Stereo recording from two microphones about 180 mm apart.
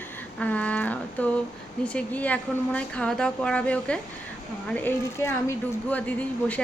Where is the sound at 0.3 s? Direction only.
5° left (ahead or behind).